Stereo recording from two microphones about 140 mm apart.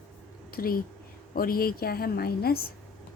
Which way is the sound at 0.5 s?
90° left.